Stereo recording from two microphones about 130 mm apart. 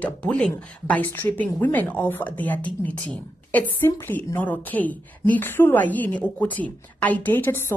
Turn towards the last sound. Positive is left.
turn(degrees=15)  # may be behind; listen again after turning